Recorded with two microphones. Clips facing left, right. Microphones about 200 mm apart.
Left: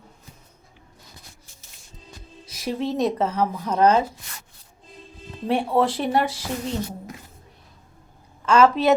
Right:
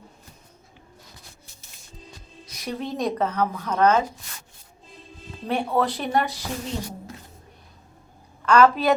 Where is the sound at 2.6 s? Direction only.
25° left (ahead or behind).